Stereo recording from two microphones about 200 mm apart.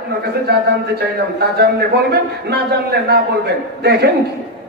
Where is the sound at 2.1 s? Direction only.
55° right (ahead or behind).